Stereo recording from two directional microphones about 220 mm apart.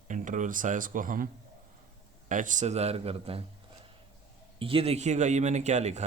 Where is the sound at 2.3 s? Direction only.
35° right (ahead or behind).